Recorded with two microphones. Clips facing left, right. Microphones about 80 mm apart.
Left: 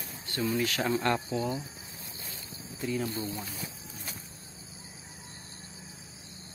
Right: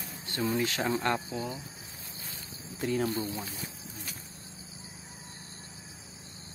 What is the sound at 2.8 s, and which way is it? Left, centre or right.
Speech, right.